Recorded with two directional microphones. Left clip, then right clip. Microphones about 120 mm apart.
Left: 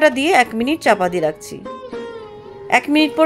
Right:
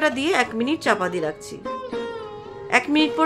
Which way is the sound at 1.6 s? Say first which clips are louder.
Right 1 dB; centre (ahead or behind).